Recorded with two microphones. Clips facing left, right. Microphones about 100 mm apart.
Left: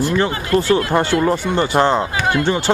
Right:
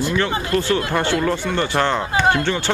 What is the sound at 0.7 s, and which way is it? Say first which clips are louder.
Speech: left 4 dB; 25° left (ahead or behind).